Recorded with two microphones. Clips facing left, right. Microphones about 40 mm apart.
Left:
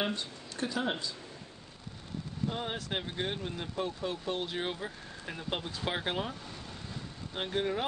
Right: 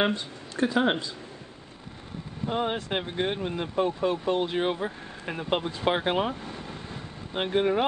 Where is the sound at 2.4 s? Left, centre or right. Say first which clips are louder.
Right 8 dB; right.